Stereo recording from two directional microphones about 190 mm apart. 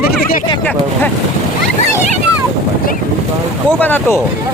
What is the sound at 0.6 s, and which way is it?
Speech, 10° left (ahead or behind).